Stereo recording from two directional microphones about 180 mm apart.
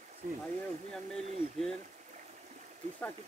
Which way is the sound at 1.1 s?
Centre (ahead or behind).